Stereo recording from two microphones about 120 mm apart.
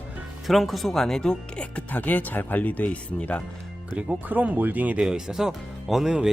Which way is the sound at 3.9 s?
15° right (ahead or behind).